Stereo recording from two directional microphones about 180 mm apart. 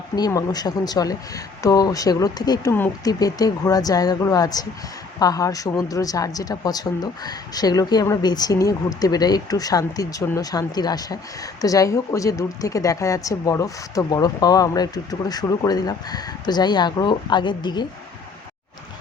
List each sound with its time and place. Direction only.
0.2 s speech: 20° left (ahead or behind)